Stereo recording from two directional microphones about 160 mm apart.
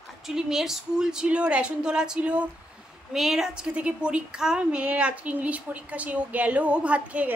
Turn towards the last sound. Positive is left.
turn(degrees=-10)  # may be behind; listen again after turning